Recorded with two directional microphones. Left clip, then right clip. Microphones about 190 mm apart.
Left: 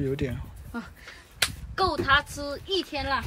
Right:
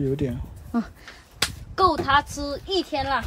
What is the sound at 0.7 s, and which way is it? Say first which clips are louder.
A woman's voice: right 8 dB; 50° right (ahead or behind).